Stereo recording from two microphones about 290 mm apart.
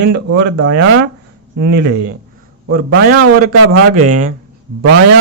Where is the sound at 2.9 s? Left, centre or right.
Right.